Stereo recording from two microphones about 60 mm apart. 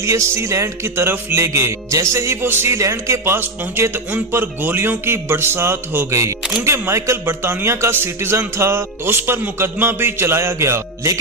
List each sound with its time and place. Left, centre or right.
0.0 s a man's voice: right
1.9 s speech: right
2.4 s a man's voice: right
2.8 s a man's voice: right
3.3 s a man's voice: right